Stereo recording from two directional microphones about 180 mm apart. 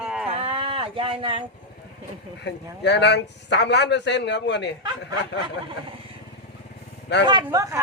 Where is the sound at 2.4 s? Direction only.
70° left (ahead or behind).